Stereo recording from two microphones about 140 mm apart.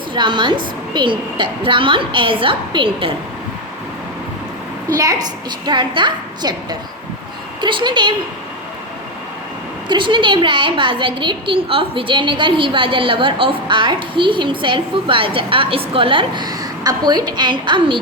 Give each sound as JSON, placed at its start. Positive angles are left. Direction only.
{"t": 0.1, "sound": "a woman's voice", "side_deg": -35}
{"t": 4.9, "sound": "a woman's voice", "side_deg": -25}
{"t": 9.9, "sound": "a woman's voice", "side_deg": -35}